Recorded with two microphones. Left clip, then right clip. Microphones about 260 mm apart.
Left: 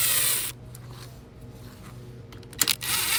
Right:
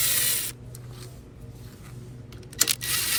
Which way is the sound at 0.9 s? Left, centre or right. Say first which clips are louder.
Left 1 dB; left.